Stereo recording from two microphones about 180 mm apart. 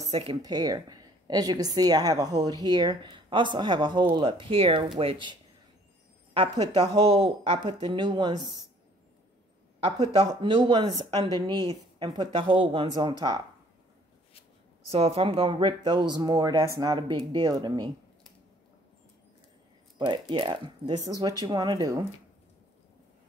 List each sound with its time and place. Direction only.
0.1 s speech: 30° right (ahead or behind)
0.4 s speech: 20° right (ahead or behind)
9.8 s speech: 30° right (ahead or behind)
12.0 s speech: 20° right (ahead or behind)
14.9 s speech: 35° right (ahead or behind)
20.1 s speech: 25° right (ahead or behind)